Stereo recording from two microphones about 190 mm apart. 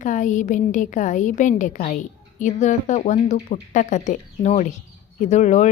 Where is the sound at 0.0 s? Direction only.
40° left (ahead or behind).